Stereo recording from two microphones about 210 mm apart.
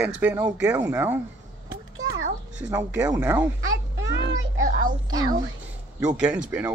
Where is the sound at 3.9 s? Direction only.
65° right (ahead or behind).